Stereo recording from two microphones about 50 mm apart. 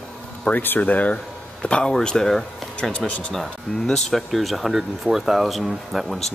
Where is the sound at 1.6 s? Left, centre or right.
Centre.